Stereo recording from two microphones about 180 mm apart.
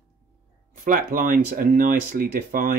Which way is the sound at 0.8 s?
50° right (ahead or behind).